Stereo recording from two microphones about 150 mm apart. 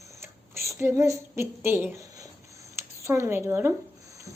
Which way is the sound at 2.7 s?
15° right (ahead or behind).